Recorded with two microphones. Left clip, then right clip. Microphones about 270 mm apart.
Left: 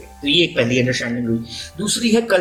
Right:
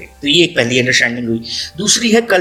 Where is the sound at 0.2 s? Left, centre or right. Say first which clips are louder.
Right 4 dB; right.